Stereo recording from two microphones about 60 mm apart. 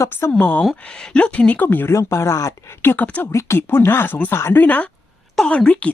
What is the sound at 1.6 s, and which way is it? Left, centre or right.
Speech, left.